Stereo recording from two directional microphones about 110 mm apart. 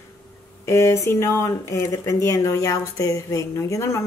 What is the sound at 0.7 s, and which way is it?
Speech, 25° left (ahead or behind).